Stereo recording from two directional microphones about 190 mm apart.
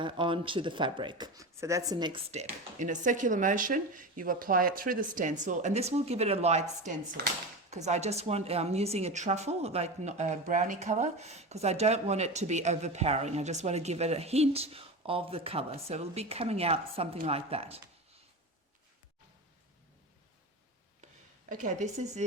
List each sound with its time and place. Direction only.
0.0 s speech: 25° right (ahead or behind)
2.5 s a woman's voice: 40° right (ahead or behind)
21.5 s a woman's voice: 40° right (ahead or behind)